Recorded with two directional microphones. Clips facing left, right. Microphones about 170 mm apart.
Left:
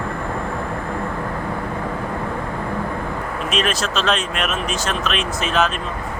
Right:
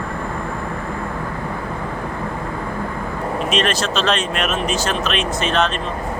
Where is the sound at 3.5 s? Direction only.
Centre (ahead or behind).